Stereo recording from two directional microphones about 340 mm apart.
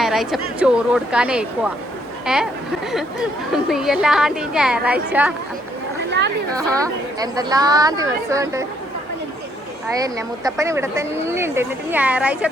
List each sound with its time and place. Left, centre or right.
0.0 s a woman's voice: centre
6.1 s chatter: right
6.6 s speech: centre
10.0 s a woman's voice: centre